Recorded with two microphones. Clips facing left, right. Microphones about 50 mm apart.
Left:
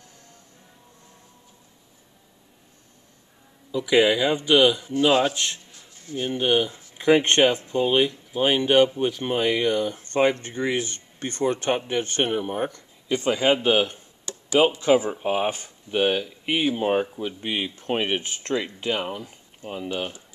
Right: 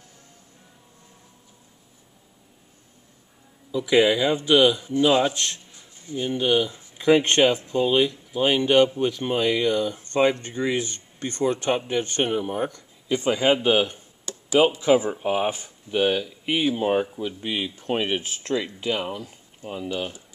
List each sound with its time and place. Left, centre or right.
3.7 s speech: centre
6.1 s speech: left
13.1 s speech: centre